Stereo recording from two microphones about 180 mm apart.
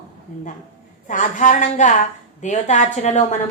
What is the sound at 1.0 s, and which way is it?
A woman's voice, 45° left (ahead or behind).